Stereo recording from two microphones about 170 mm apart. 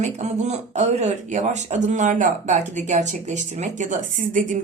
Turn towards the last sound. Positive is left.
turn(degrees=-50)  # may be behind; listen again after turning